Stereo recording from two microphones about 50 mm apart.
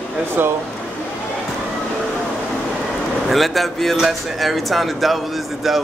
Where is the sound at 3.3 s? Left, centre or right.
Centre.